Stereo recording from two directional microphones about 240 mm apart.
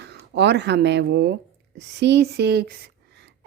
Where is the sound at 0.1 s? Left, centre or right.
Right.